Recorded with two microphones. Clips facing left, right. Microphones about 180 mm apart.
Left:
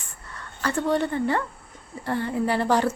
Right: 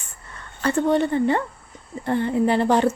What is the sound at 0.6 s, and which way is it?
Speech, 25° right (ahead or behind).